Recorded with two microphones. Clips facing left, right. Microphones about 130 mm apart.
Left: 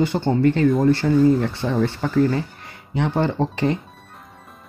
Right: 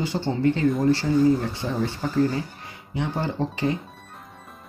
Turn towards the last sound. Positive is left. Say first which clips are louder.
# left 4 dB
turn(degrees=65)  # may be behind; listen again after turning